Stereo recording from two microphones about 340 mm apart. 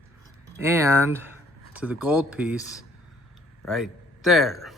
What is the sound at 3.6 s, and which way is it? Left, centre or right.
A man's voice, centre.